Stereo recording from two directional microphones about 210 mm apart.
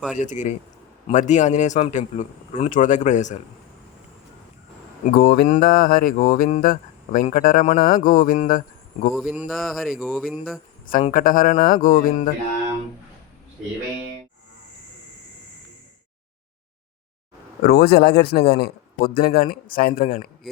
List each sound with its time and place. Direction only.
0.2 s mantra: 35° left (ahead or behind)
5.0 s mantra: 45° left (ahead or behind)
9.1 s speech: 5° right (ahead or behind)
10.8 s mantra: 40° left (ahead or behind)
17.6 s a man's voice: 50° left (ahead or behind)